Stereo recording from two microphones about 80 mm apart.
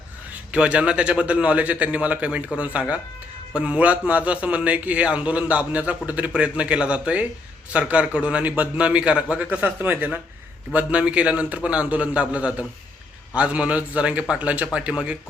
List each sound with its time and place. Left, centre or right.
0.5 s a man's voice: centre